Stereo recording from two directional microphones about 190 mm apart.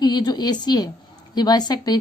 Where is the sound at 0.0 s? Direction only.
20° left (ahead or behind).